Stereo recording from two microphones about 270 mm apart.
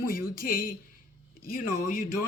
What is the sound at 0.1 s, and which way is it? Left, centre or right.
Speech, left.